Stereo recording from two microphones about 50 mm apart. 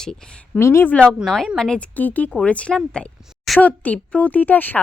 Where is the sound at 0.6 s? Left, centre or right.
Left.